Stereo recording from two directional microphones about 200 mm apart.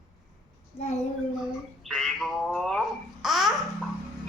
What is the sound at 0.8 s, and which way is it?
Speech, 30° left (ahead or behind).